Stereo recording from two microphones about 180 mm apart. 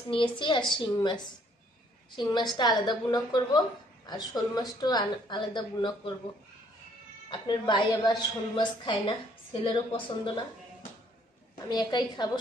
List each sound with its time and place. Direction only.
0.1 s a woman's voice: 25° left (ahead or behind)
2.1 s a woman's voice: 25° left (ahead or behind)
7.2 s a woman's voice: 25° left (ahead or behind)
11.5 s a woman's voice: 25° left (ahead or behind)